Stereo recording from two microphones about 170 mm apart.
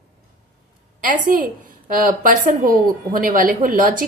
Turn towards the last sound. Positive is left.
turn(degrees=-50)  # may be behind; listen again after turning